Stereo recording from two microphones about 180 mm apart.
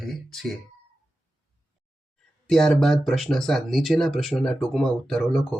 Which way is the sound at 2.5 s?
5° left (ahead or behind).